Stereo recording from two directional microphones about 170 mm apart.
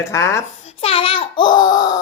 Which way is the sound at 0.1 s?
15° left (ahead or behind).